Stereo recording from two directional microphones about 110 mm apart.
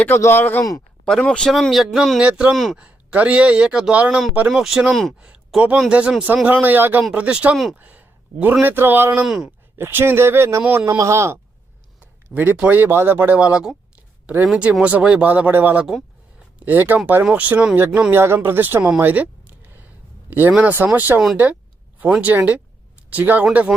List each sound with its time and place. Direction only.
0.2 s speech: 20° left (ahead or behind)
1.0 s a man's voice: 10° left (ahead or behind)
2.7 s a man's voice: 10° right (ahead or behind)
7.8 s a sound: 15° right (ahead or behind)
8.6 s speech: 20° right (ahead or behind)
9.2 s a man's voice: 5° right (ahead or behind)
9.7 s speech: 20° right (ahead or behind)
11.9 s speech: 15° right (ahead or behind)
18.9 s a sound: 15° right (ahead or behind)
20.7 s speech: 15° right (ahead or behind)